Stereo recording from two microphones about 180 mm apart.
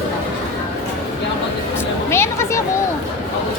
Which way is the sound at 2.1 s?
15° left (ahead or behind).